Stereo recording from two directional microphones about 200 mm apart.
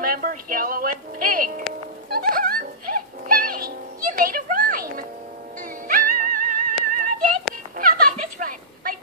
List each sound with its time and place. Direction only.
0.0 s speech: 45° right (ahead or behind)
2.0 s music: 50° right (ahead or behind)
7.7 s a sound: 45° right (ahead or behind)